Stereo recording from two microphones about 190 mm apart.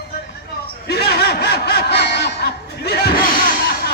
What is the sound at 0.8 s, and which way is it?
Snicker, 60° left (ahead or behind).